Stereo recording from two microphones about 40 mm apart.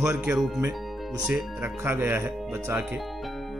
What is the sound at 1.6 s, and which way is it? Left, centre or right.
Speech, right.